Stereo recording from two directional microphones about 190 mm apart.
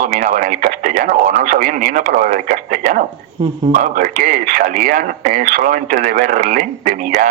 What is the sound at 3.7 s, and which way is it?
Speech, 45° right (ahead or behind).